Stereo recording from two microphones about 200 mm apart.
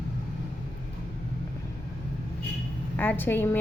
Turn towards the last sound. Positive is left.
turn(degrees=10)  # may be behind; listen again after turning